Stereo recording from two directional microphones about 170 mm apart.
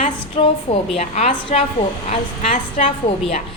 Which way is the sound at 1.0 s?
40° left (ahead or behind).